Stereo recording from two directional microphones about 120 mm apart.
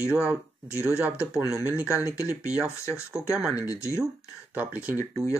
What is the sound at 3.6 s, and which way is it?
Speech, 25° left (ahead or behind).